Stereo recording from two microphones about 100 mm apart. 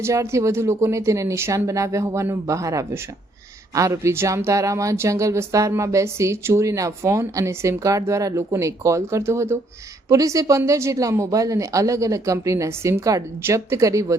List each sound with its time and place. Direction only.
0.0 s speech: 30° right (ahead or behind)